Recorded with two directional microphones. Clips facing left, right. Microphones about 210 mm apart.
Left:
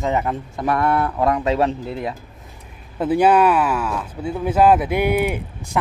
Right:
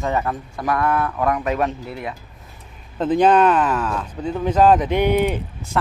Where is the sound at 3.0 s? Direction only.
10° left (ahead or behind).